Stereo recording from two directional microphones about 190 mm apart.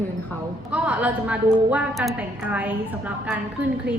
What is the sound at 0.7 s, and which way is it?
A woman's voice, 5° right (ahead or behind).